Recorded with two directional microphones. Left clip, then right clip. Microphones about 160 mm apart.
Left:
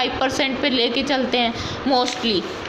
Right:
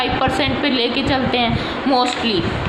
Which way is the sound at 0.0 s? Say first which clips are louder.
Right 3 dB; 30° left (ahead or behind).